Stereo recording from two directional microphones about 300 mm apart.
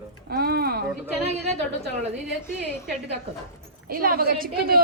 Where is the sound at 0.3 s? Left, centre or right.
Right.